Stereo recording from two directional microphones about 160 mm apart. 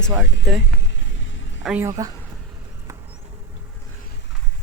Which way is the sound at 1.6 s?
5° right (ahead or behind).